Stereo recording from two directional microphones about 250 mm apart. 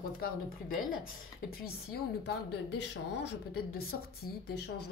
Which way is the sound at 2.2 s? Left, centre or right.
Left.